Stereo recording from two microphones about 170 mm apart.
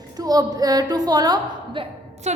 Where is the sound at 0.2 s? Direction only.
20° right (ahead or behind).